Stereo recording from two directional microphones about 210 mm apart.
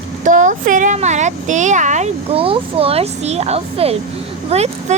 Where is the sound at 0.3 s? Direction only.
40° right (ahead or behind).